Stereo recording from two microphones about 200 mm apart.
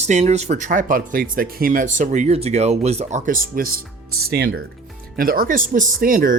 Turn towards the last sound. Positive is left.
turn(degrees=-45)  # may be behind; listen again after turning